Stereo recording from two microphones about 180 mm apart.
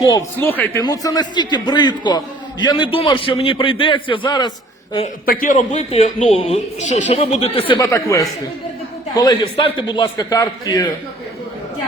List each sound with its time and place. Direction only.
0.0 s a man's voice: 20° left (ahead or behind)
0.3 s a man's voice: 10° left (ahead or behind)
5.2 s a man's voice: 50° left (ahead or behind); by 7.6 s 35° left (ahead or behind)
7.7 s a man's voice: 20° left (ahead or behind)